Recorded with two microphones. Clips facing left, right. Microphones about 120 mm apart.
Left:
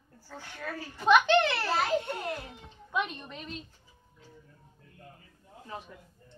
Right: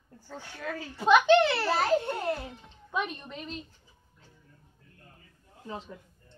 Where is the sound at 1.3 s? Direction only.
10° right (ahead or behind).